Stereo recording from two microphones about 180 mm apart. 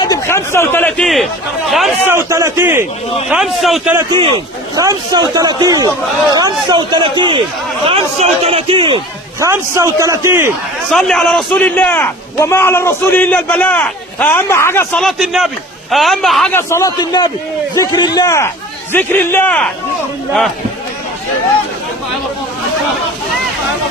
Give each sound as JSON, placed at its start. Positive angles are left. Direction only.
{"t": 0.0, "sound": "a sound", "side_deg": 15}
{"t": 2.0, "sound": "a man's voice", "side_deg": -15}
{"t": 3.2, "sound": "a man's voice", "side_deg": -5}
{"t": 4.1, "sound": "a man's voice", "side_deg": -25}
{"t": 9.4, "sound": "a man's voice", "side_deg": -15}
{"t": 10.9, "sound": "a man's voice", "side_deg": 5}
{"t": 15.0, "sound": "a man's voice", "side_deg": 0}
{"t": 16.5, "sound": "a man's voice", "side_deg": 15}